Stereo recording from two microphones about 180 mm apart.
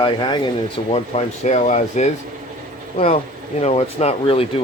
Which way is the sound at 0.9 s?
40° left (ahead or behind).